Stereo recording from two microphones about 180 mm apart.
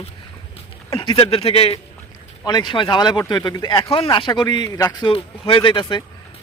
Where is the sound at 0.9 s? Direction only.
30° left (ahead or behind).